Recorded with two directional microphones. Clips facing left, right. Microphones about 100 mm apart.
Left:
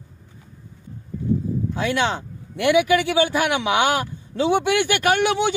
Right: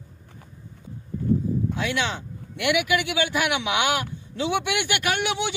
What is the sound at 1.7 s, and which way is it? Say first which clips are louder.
A man's voice: left 5 dB; 40° left (ahead or behind).